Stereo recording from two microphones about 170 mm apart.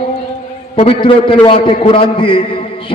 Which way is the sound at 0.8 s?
30° left (ahead or behind).